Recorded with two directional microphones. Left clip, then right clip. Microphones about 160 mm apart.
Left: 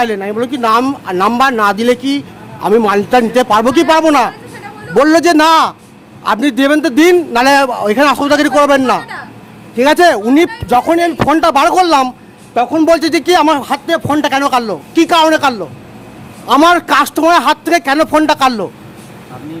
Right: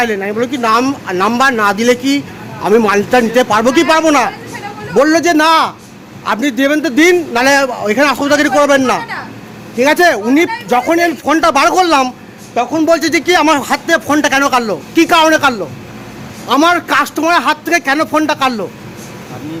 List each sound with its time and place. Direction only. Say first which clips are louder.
0.0 s a man's voice: even; 30° left (ahead or behind)
4.9 s a man's voice: left 2 dB; 45° left (ahead or behind)
6.5 s a man's voice: left 1 dB; 45° left (ahead or behind); by 12.1 s 25° left (ahead or behind)
12.5 s a man's voice: left 2 dB; 50° left (ahead or behind)
13.0 s a man's voice: left 1 dB; 35° left (ahead or behind)
16.5 s a man's voice: left 2 dB; 35° left (ahead or behind)